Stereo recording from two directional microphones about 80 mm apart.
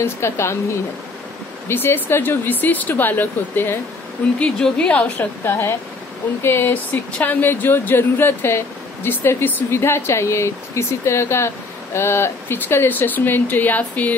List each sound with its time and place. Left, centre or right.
0.0 s speech: left
4.4 s a woman's voice: centre
5.4 s speech: left
6.9 s speech: centre